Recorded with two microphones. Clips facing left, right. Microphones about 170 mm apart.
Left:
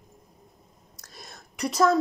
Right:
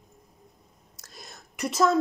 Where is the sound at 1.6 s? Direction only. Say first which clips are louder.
Left 1 dB; 5° right (ahead or behind).